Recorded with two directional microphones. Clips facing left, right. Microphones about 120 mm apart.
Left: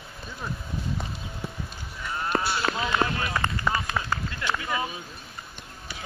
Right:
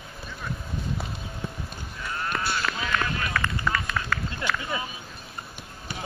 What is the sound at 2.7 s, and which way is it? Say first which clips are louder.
Run: left 3 dB; 30° left (ahead or behind).